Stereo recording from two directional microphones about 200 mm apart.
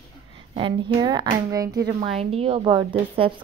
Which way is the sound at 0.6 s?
25° right (ahead or behind).